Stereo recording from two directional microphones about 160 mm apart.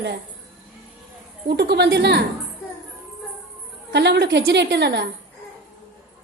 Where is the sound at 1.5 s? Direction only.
90° right.